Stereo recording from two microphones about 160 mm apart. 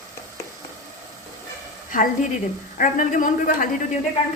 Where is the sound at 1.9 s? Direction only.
55° left (ahead or behind).